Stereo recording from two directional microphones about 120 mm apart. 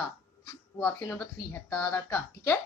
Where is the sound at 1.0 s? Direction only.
20° left (ahead or behind).